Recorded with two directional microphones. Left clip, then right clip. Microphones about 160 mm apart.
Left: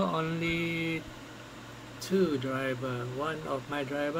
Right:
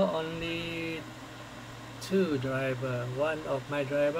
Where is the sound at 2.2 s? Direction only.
25° left (ahead or behind).